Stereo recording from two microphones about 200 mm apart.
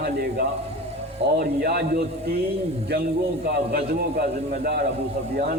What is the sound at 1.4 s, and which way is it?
A man's voice, 50° right (ahead or behind).